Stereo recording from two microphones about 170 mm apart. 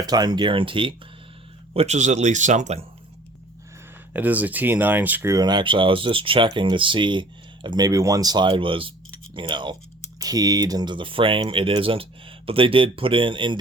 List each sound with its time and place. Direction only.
0.0 s speech: 25° right (ahead or behind); by 2.8 s 45° right (ahead or behind)
4.1 s speech: 10° right (ahead or behind); by 13.6 s 30° right (ahead or behind)